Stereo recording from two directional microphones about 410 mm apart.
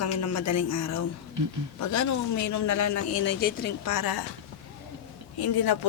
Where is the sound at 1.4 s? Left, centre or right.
Right.